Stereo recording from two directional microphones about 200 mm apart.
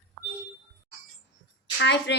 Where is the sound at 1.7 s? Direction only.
60° left (ahead or behind).